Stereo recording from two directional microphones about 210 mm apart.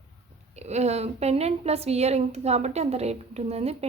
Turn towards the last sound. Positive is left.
turn(degrees=-30)  # may be behind; listen again after turning